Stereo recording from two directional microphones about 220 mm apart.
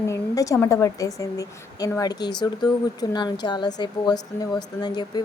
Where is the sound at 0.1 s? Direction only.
15° left (ahead or behind).